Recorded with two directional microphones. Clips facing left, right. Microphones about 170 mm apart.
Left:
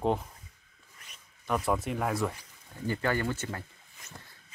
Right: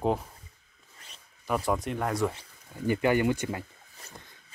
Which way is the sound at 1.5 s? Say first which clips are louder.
Right 1 dB; centre (ahead or behind).